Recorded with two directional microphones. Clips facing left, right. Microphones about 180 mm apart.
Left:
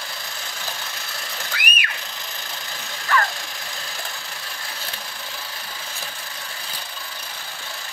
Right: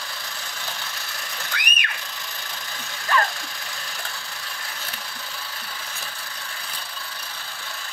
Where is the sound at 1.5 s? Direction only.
5° left (ahead or behind).